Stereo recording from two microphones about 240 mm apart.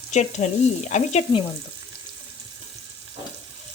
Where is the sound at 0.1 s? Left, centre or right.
Left.